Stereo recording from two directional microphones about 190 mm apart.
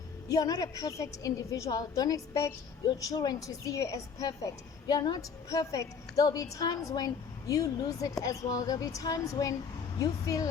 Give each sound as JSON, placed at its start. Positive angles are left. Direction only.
{"t": 0.3, "sound": "a woman's voice", "side_deg": 20}